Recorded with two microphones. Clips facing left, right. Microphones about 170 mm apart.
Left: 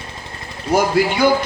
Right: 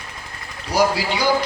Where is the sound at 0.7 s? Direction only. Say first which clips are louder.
Left 3 dB; 50° left (ahead or behind).